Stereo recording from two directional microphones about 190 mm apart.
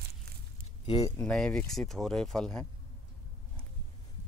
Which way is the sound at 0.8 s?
20° left (ahead or behind).